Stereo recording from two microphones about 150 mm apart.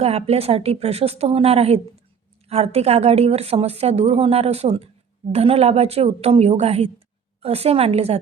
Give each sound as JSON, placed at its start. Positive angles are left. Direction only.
{"t": 0.0, "sound": "a woman's voice", "side_deg": -45}